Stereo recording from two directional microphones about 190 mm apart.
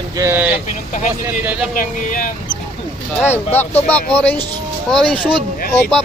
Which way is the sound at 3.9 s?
5° left (ahead or behind).